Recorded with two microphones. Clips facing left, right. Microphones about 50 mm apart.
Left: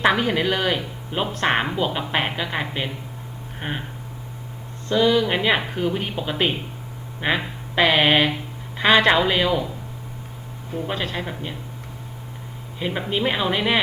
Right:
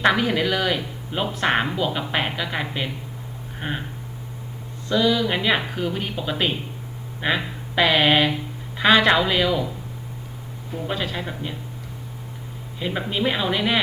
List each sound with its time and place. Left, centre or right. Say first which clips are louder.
0.0 s speech: even; centre
4.9 s speech: left 2 dB; centre
10.8 s speech: right 1 dB; centre
12.8 s speech: left 1 dB; centre